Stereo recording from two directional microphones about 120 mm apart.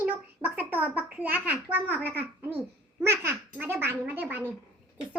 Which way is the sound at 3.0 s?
20° right (ahead or behind).